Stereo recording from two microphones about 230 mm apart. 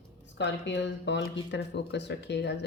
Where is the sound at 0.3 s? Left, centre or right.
Left.